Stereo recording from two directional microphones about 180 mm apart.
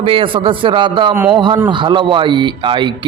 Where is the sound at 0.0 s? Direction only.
30° right (ahead or behind).